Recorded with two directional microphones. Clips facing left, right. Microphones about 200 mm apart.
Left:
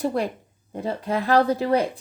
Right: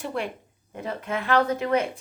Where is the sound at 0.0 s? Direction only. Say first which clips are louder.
Left 6 dB; 40° left (ahead or behind).